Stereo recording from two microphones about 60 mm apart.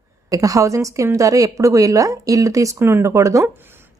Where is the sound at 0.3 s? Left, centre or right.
Right.